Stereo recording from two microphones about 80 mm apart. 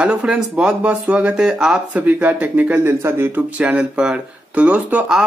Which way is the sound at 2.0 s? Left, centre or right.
Right.